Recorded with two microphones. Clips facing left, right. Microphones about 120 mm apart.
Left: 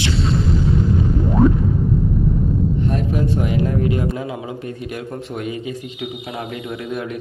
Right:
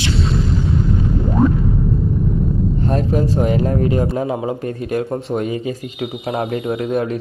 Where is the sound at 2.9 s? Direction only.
35° right (ahead or behind).